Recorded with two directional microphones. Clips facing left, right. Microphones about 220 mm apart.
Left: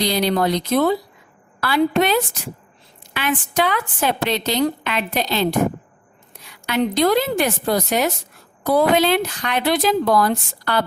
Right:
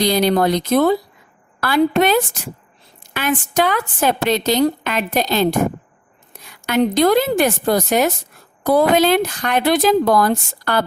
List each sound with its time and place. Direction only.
0.0 s a woman's voice: 50° right (ahead or behind)